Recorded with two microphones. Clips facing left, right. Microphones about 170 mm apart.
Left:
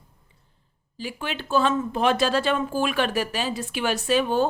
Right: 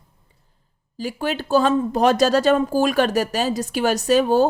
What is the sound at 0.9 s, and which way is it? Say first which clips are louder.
Speech: right 7 dB; 40° right (ahead or behind).